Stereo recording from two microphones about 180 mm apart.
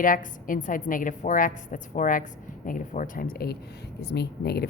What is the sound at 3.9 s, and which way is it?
Speech, 65° left (ahead or behind).